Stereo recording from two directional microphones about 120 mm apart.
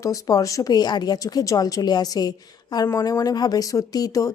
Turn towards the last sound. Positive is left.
turn(degrees=30)  # may be behind; listen again after turning